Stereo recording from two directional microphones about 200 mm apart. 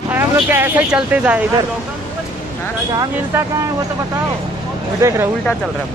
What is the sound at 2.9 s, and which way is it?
Speech, 15° right (ahead or behind).